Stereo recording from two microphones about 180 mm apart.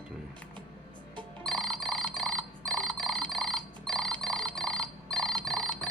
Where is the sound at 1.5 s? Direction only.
5° left (ahead or behind).